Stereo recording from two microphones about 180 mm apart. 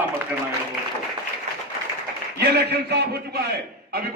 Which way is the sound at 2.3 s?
65° right (ahead or behind).